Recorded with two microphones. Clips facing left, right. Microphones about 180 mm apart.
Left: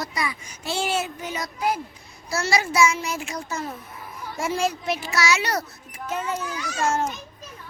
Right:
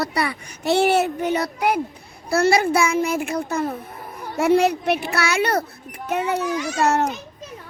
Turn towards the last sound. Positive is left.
turn(degrees=-65)  # may be behind; listen again after turning